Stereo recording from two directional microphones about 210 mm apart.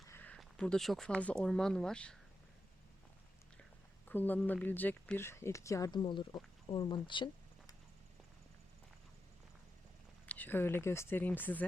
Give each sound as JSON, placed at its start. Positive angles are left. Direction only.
{"t": 0.1, "sound": "speech", "side_deg": 10}
{"t": 4.1, "sound": "speech", "side_deg": 10}
{"t": 10.2, "sound": "speech", "side_deg": 10}